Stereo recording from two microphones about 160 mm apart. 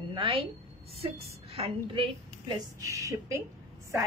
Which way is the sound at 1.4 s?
40° right (ahead or behind).